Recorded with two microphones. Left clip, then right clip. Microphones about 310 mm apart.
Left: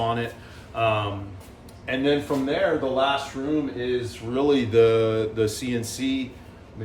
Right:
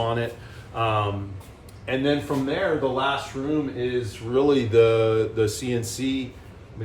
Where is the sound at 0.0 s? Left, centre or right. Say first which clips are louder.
Even; centre.